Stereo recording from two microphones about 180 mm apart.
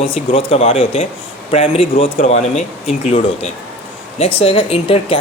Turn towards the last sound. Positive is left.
turn(degrees=30)  # may be behind; listen again after turning